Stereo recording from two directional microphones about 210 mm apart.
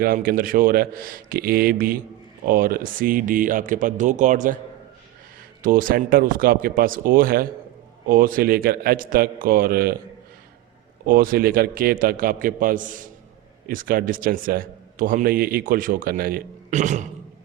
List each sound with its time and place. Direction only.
0.0 s a man's voice: 45° right (ahead or behind)
5.6 s a man's voice: 40° right (ahead or behind)
11.0 s a man's voice: 45° right (ahead or behind)